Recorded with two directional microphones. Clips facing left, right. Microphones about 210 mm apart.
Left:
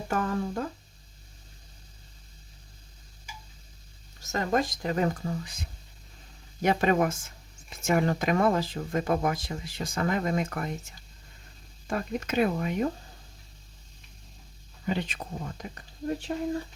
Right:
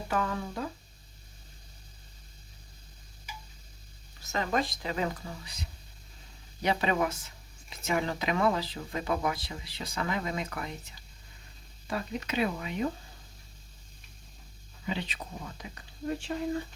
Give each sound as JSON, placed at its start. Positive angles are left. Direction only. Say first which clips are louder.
{"t": 0.1, "sound": "speech", "louder": "left 3 dB", "side_deg": 45}
{"t": 4.2, "sound": "speech", "louder": "left 3 dB", "side_deg": 45}
{"t": 14.8, "sound": "speech", "louder": "left 4 dB", "side_deg": 45}